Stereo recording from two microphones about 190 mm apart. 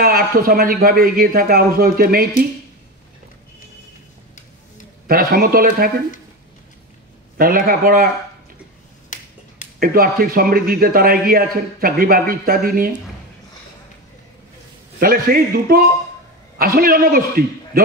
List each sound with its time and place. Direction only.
0.0 s a man's voice: 50° right (ahead or behind)
5.0 s a man's voice: 50° right (ahead or behind)
7.3 s a man's voice: 50° right (ahead or behind)
9.1 s finger snapping: 40° left (ahead or behind)
9.8 s a man's voice: 50° right (ahead or behind)
15.0 s a man's voice: 50° right (ahead or behind)